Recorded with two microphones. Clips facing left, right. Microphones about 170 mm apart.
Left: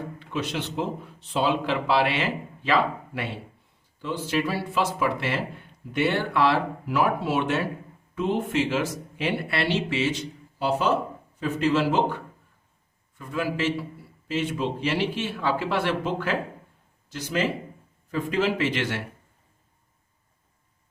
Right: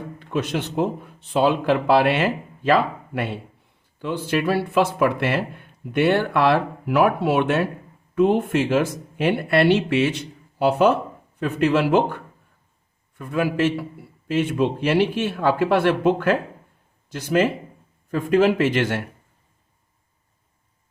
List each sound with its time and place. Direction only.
0.2 s speech: 50° right (ahead or behind)
4.0 s speech: 60° right (ahead or behind)